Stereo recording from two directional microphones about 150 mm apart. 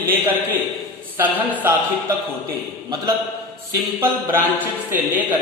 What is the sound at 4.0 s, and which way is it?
Mantra, 15° right (ahead or behind).